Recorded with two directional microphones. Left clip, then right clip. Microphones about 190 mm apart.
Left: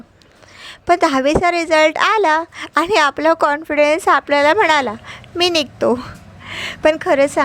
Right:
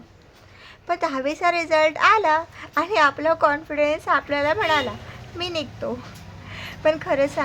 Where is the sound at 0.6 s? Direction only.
40° left (ahead or behind).